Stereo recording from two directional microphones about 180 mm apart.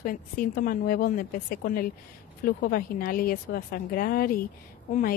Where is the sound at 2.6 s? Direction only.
55° left (ahead or behind).